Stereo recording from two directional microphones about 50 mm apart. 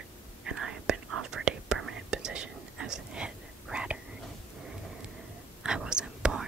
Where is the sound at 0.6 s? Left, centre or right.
Centre.